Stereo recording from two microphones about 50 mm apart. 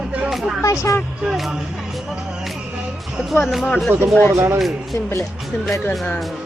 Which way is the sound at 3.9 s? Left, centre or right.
Right.